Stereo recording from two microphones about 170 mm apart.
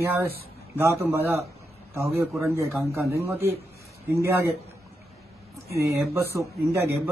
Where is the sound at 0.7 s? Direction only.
15° right (ahead or behind).